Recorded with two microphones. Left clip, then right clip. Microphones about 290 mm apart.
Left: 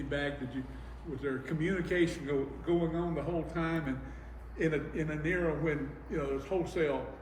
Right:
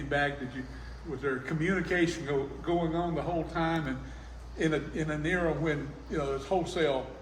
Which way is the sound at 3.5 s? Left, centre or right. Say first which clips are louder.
Right 4 dB; right.